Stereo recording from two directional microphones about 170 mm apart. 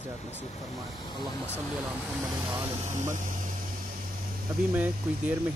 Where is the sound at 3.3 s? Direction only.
50° right (ahead or behind).